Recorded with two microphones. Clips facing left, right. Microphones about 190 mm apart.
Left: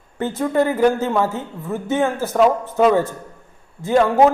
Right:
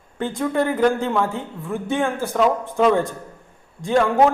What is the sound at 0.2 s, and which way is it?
Speech, 5° left (ahead or behind).